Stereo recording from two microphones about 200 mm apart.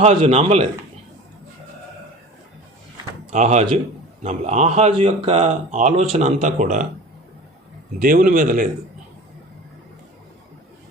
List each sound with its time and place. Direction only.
0.0 s speech: 30° right (ahead or behind)
3.2 s speech: 35° right (ahead or behind)
8.0 s a man's voice: 45° right (ahead or behind)